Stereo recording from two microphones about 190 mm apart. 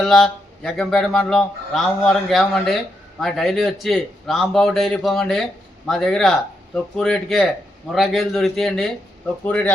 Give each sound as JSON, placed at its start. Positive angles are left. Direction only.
{"t": 0.0, "sound": "a man's voice", "side_deg": 5}